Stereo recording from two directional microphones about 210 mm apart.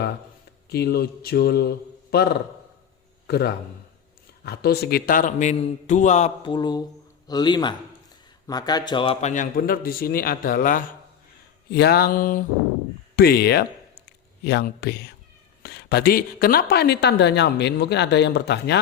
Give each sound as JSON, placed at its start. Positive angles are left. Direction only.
{"t": 0.7, "sound": "a man's voice", "side_deg": 50}
{"t": 9.3, "sound": "speech", "side_deg": 40}